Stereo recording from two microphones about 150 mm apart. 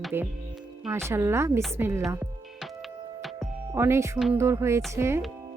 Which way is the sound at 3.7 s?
15° right (ahead or behind).